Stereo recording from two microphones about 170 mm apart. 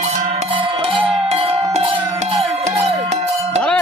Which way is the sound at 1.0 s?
35° right (ahead or behind).